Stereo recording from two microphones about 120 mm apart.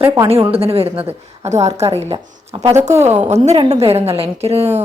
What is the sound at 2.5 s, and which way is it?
Speech, 40° right (ahead or behind).